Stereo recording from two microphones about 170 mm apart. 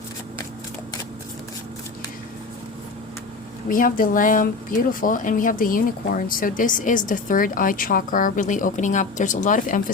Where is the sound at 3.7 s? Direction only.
55° left (ahead or behind).